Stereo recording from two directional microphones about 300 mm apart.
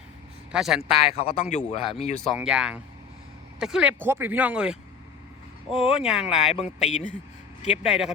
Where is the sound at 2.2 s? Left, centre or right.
Centre.